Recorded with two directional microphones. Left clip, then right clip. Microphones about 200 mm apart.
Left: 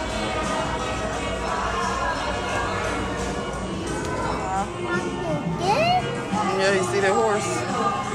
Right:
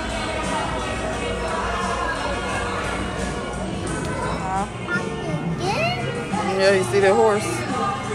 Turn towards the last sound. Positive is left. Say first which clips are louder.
# right 4 dB
turn(degrees=10)  # may be behind; listen again after turning